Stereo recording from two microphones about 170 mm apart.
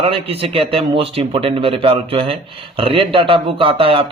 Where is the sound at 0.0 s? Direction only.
35° right (ahead or behind).